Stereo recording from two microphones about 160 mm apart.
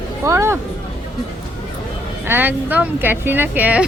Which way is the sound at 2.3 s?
10° right (ahead or behind).